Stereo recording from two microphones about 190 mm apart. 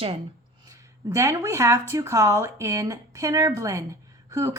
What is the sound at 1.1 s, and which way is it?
Speech, 15° right (ahead or behind).